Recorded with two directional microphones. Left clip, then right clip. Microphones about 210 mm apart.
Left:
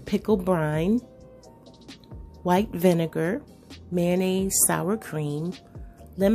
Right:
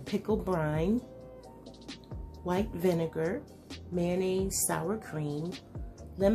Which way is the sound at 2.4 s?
40° left (ahead or behind).